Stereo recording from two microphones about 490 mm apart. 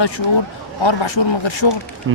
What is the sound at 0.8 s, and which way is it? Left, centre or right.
Speech, left.